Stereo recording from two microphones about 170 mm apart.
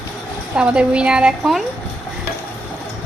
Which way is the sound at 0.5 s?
5° right (ahead or behind).